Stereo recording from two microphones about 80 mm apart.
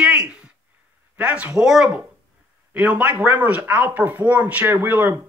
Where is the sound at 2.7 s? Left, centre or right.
Centre.